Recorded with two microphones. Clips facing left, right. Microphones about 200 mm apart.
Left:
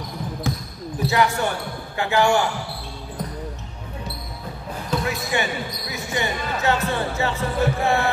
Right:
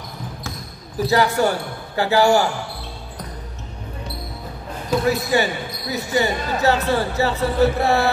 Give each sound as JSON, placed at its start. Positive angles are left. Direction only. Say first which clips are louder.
{"t": 1.0, "sound": "speech", "louder": "right 3 dB", "side_deg": -35}
{"t": 5.0, "sound": "speech", "louder": "right 8 dB", "side_deg": -35}